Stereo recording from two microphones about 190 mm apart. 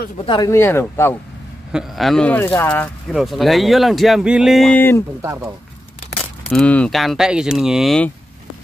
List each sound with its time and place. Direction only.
0.2 s speech: 25° left (ahead or behind)
0.5 s speech: 15° left (ahead or behind)
1.7 s speech: centre (ahead or behind)
5.2 s speech: 10° right (ahead or behind)
6.5 s speech: 5° left (ahead or behind)